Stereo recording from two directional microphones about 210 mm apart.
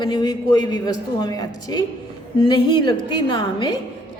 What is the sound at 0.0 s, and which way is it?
A woman's voice, 20° left (ahead or behind).